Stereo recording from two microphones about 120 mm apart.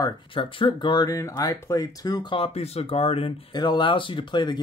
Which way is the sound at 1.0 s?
25° left (ahead or behind).